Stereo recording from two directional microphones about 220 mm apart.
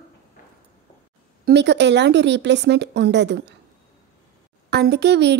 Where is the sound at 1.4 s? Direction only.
50° right (ahead or behind).